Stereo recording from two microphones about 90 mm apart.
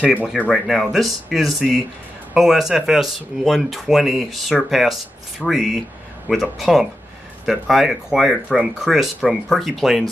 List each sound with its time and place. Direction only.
0.0 s speech: 15° right (ahead or behind)
0.5 s speech: centre (ahead or behind)
6.3 s speech: 15° right (ahead or behind)
6.6 s speech: centre (ahead or behind)